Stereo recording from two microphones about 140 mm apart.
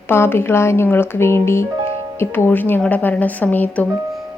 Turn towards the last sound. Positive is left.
turn(degrees=10)  # may be behind; listen again after turning